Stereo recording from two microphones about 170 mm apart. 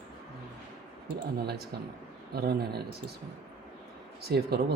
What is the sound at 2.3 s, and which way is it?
Speech, 70° right (ahead or behind).